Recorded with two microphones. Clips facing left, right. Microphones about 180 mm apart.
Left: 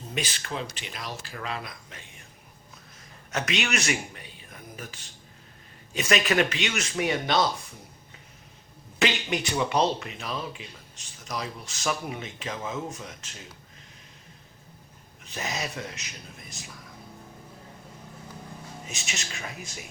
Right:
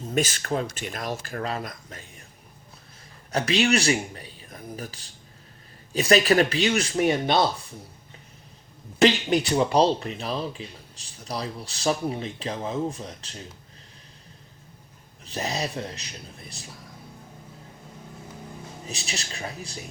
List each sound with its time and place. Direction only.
0.1 s speech: 45° right (ahead or behind)
3.3 s speech: 35° right (ahead or behind)
7.0 s speech: 55° right (ahead or behind)
9.0 s speech: 35° right (ahead or behind)
15.2 s speech: 35° right (ahead or behind)
18.9 s speech: 35° right (ahead or behind)